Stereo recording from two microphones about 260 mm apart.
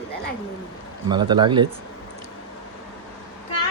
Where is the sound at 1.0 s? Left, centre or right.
Centre.